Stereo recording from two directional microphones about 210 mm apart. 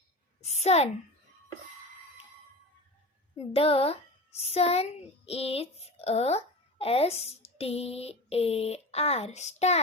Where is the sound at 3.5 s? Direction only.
30° left (ahead or behind).